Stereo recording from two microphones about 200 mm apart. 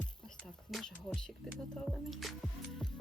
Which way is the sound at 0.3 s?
Centre (ahead or behind).